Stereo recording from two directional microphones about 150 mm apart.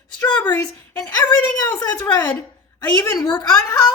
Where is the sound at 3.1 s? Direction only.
25° left (ahead or behind).